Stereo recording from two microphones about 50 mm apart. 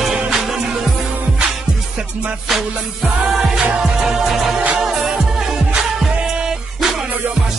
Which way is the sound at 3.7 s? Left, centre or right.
Centre.